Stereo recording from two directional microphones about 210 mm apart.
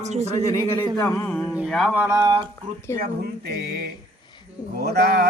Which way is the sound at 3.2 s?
50° right (ahead or behind).